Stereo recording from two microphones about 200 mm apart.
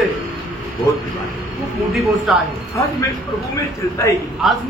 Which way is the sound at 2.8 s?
15° left (ahead or behind).